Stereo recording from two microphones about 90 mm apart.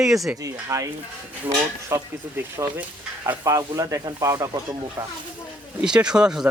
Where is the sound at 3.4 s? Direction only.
35° right (ahead or behind).